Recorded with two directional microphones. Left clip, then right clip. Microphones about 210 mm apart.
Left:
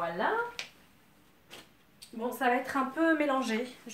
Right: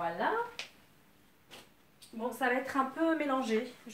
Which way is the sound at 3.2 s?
45° left (ahead or behind).